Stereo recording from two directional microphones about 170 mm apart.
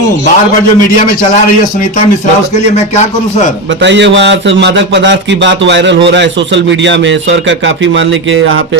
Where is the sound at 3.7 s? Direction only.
90° right.